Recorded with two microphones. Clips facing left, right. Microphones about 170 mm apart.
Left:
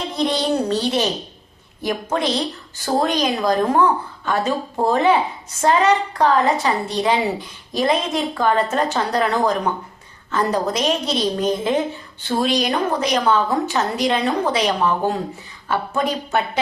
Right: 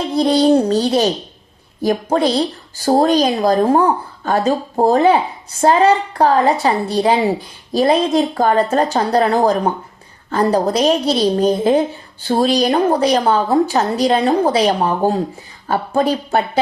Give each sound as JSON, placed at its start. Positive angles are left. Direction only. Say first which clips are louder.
{"t": 0.2, "sound": "a woman's voice", "louder": "right 8 dB", "side_deg": -35}